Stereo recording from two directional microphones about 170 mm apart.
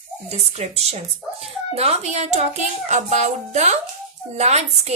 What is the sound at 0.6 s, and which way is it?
A woman's voice, 40° right (ahead or behind).